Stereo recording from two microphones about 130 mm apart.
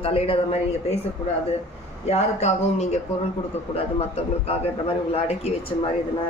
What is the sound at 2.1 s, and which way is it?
Speech, 55° left (ahead or behind).